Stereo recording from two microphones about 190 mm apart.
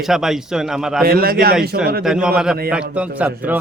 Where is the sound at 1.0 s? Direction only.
55° right (ahead or behind).